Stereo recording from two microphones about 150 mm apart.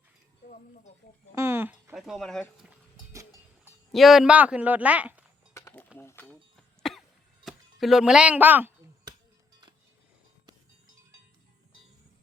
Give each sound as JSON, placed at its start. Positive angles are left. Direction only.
{"t": 0.4, "sound": "speech", "side_deg": 60}
{"t": 1.4, "sound": "speech", "side_deg": -15}
{"t": 1.9, "sound": "speech", "side_deg": 0}
{"t": 3.9, "sound": "speech", "side_deg": 0}
{"t": 5.5, "sound": "a sound", "side_deg": 20}
{"t": 6.6, "sound": "cough", "side_deg": 0}
{"t": 7.4, "sound": "speech", "side_deg": 0}